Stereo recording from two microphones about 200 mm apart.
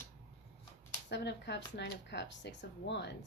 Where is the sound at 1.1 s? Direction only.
60° left (ahead or behind).